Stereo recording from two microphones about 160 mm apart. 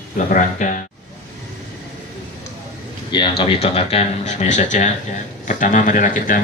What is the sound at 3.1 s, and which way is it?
A man's voice, 30° left (ahead or behind).